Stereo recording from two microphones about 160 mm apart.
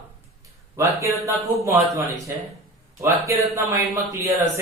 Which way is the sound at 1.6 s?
20° right (ahead or behind).